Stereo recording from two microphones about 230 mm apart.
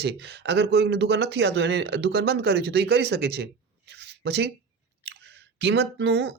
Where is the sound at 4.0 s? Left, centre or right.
Right.